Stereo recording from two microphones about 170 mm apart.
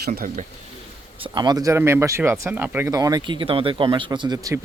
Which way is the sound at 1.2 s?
25° right (ahead or behind).